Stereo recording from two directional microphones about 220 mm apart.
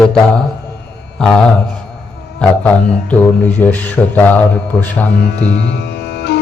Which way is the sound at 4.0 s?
Centre (ahead or behind).